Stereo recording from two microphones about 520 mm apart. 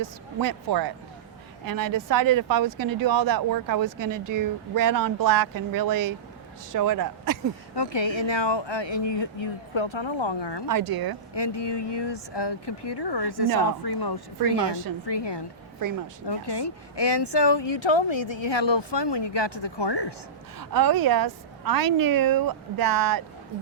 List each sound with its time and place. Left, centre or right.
0.0 s speech: right
7.8 s speech: left
10.7 s speech: right
11.3 s a woman's voice: left
20.6 s speech: right